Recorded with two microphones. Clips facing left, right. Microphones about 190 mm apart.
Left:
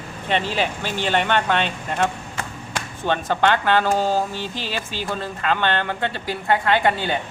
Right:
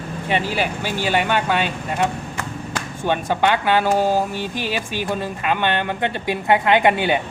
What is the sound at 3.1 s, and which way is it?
Speech, 10° right (ahead or behind).